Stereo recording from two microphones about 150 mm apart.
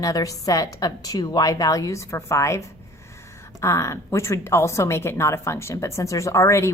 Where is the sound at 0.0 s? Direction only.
25° left (ahead or behind).